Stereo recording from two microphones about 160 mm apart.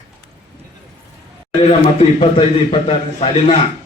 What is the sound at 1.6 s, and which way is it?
A man's voice, 40° left (ahead or behind).